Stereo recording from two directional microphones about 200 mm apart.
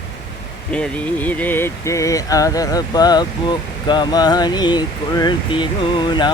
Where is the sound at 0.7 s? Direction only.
5° left (ahead or behind).